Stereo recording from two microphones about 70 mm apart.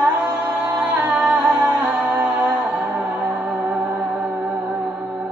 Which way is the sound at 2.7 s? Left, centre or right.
Right.